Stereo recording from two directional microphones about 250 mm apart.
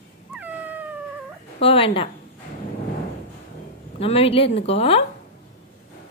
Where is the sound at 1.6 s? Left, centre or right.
Left.